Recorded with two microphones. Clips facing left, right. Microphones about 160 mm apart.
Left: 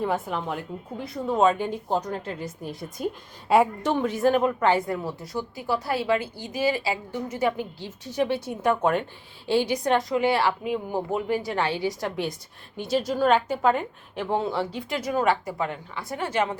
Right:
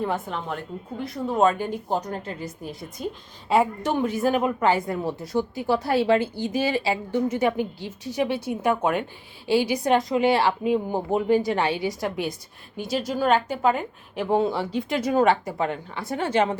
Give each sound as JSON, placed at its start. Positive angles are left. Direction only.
{"t": 0.0, "sound": "a woman's voice", "side_deg": 5}
{"t": 5.0, "sound": "a woman's voice", "side_deg": -25}